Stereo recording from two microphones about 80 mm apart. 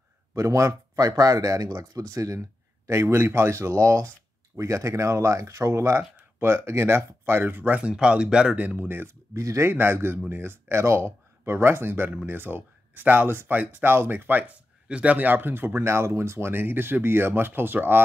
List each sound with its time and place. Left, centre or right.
0.4 s speech: right